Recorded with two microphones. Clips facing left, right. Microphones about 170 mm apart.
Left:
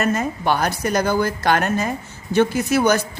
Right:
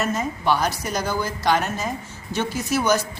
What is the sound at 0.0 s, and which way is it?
A woman's voice, 60° left (ahead or behind).